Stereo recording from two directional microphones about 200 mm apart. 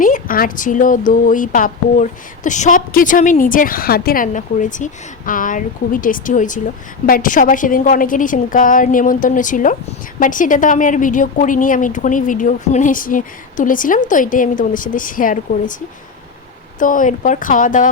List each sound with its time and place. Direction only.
0.0 s a woman's voice: 45° left (ahead or behind)
16.8 s a woman's voice: 40° left (ahead or behind)